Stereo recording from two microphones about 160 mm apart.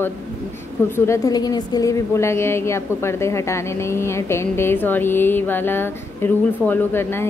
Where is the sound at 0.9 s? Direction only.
15° left (ahead or behind).